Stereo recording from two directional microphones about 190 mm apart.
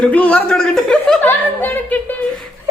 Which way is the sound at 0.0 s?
5° left (ahead or behind).